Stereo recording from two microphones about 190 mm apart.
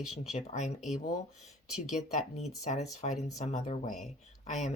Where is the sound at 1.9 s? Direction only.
35° left (ahead or behind).